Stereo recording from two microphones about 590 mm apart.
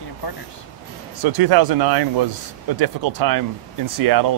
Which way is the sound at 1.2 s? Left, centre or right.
Right.